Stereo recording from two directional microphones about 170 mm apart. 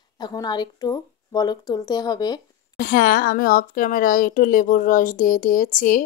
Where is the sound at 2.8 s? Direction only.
60° left (ahead or behind).